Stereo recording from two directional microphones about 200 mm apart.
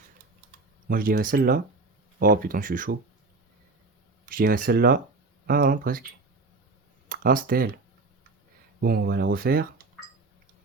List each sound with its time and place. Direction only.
0.9 s speech: 45° right (ahead or behind)
4.3 s speech: 45° right (ahead or behind)
7.1 s speech: 45° right (ahead or behind)
8.8 s speech: 50° right (ahead or behind)